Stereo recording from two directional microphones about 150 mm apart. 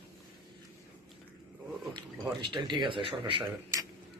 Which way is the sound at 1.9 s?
30° right (ahead or behind).